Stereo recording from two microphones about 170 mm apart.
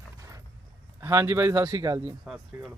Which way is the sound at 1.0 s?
15° right (ahead or behind).